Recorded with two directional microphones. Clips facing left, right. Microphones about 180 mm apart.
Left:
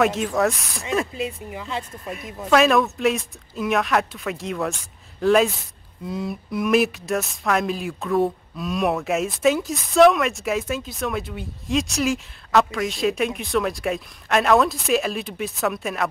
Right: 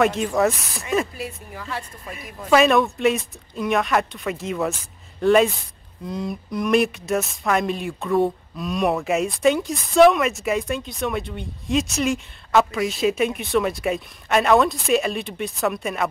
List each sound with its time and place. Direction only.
0.0 s speech: centre (ahead or behind)
1.1 s speech: 20° left (ahead or behind)
2.5 s speech: centre (ahead or behind)